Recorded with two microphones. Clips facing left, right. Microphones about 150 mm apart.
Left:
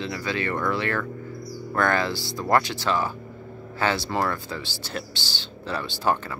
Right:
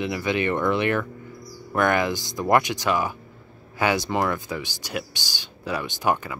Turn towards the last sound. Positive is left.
turn(degrees=-15)  # may be behind; listen again after turning